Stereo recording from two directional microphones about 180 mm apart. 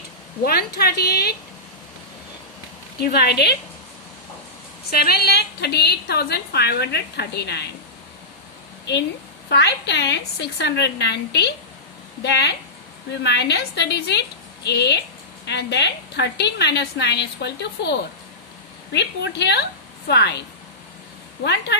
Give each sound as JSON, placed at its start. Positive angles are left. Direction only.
{"t": 0.4, "sound": "a woman's voice", "side_deg": 60}
{"t": 3.0, "sound": "a woman's voice", "side_deg": 60}
{"t": 4.9, "sound": "a woman's voice", "side_deg": 60}
{"t": 9.5, "sound": "a woman's voice", "side_deg": 70}